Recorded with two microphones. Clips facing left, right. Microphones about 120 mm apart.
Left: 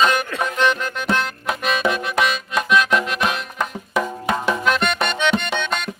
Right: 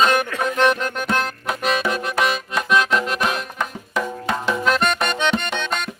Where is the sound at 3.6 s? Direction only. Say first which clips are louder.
Left 2 dB; 10° left (ahead or behind).